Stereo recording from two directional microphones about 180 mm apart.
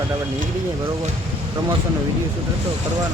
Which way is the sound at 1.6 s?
25° right (ahead or behind).